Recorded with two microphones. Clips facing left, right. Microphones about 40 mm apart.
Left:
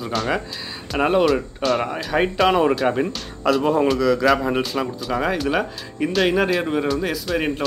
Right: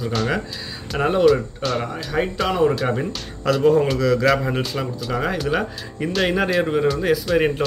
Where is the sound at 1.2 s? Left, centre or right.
Centre.